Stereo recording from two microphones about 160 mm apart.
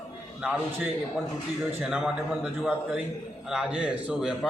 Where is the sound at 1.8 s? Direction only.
5° right (ahead or behind).